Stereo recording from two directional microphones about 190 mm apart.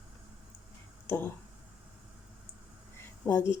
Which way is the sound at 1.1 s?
10° left (ahead or behind).